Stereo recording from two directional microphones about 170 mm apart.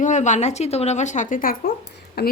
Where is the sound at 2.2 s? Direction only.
70° left (ahead or behind).